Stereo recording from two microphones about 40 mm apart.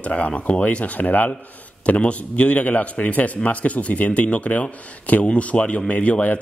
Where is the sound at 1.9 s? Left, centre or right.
Left.